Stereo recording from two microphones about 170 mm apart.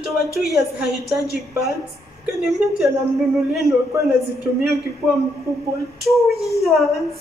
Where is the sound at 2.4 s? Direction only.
Centre (ahead or behind).